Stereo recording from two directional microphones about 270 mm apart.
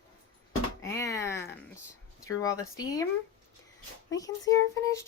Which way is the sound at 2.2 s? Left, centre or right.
Centre.